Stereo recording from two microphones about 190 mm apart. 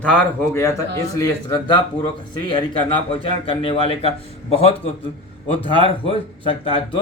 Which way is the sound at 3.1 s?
30° left (ahead or behind).